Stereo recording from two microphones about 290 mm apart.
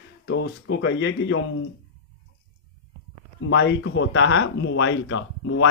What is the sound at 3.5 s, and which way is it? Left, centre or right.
Speech, left.